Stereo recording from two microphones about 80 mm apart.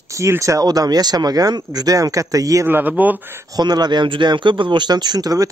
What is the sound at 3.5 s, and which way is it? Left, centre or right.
Speech, right.